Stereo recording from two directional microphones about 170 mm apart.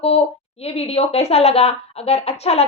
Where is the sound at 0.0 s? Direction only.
35° left (ahead or behind).